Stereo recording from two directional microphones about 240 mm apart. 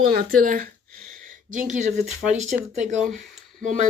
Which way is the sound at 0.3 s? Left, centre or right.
Right.